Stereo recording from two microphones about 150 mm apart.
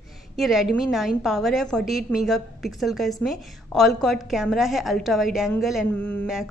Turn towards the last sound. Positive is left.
turn(degrees=10)  # may be behind; listen again after turning